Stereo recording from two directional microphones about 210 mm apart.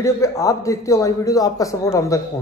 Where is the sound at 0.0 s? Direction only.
15° left (ahead or behind).